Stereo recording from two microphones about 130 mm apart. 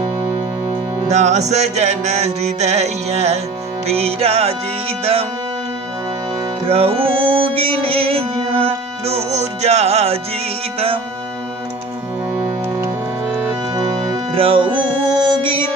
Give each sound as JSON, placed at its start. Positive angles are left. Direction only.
{"t": 1.1, "sound": "music", "side_deg": -60}
{"t": 6.7, "sound": "music", "side_deg": -50}
{"t": 13.7, "sound": "music", "side_deg": -25}
{"t": 14.3, "sound": "music", "side_deg": -45}